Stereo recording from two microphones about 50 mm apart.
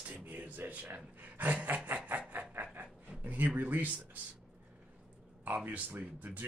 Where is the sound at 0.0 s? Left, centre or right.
Right.